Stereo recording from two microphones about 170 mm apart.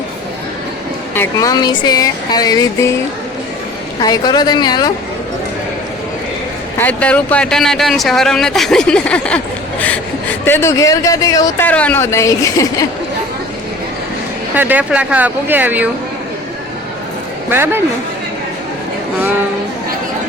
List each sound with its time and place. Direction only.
1.1 s speech: 15° left (ahead or behind)
4.0 s speech: 25° left (ahead or behind)
6.7 s speech: 10° left (ahead or behind)
10.4 s speech: 15° left (ahead or behind)
11.6 s a woman's voice: 10° left (ahead or behind)
14.5 s speech: 10° right (ahead or behind)
17.5 s speech: 15° right (ahead or behind)